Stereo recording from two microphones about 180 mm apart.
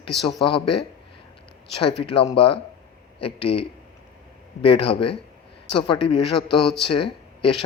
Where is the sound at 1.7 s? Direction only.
30° left (ahead or behind).